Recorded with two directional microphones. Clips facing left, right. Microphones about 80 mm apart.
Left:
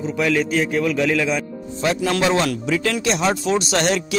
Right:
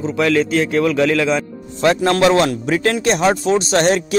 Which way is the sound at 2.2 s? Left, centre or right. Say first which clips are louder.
Right 6 dB; right.